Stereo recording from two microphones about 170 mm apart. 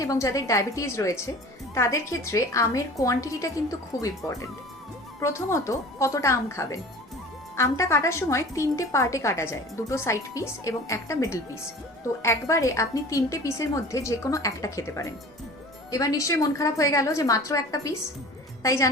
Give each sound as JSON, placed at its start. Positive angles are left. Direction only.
{"t": 0.0, "sound": "a woman's voice", "side_deg": 20}
{"t": 5.2, "sound": "a woman's voice", "side_deg": 15}